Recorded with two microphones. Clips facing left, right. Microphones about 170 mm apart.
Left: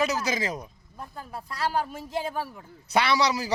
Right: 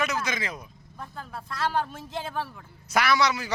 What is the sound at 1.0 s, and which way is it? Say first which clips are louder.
Speech: even; 10° left (ahead or behind).